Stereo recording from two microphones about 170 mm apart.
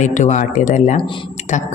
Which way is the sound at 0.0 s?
45° left (ahead or behind).